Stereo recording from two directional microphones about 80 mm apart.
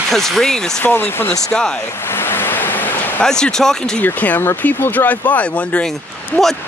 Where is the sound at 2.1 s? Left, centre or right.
Left.